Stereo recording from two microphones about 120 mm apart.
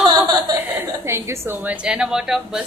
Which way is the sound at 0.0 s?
35° right (ahead or behind).